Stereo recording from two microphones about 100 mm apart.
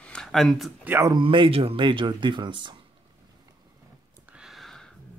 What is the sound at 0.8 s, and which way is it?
Speech, 25° right (ahead or behind).